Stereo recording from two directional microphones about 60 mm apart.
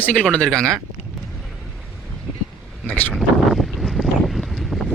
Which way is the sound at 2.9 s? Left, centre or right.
Left.